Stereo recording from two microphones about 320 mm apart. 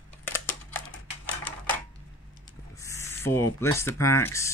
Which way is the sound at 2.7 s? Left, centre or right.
Centre.